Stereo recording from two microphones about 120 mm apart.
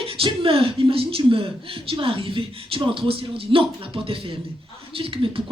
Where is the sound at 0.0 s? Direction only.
50° right (ahead or behind).